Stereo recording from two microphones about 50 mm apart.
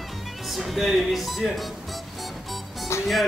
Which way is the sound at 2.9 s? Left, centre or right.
Left.